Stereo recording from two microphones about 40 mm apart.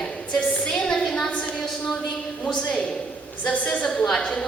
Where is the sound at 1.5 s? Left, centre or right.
Centre.